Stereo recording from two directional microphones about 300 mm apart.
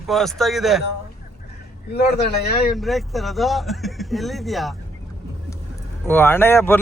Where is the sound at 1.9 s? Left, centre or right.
Left.